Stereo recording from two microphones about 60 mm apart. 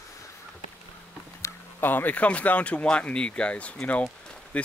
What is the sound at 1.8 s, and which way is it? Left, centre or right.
Speech, left.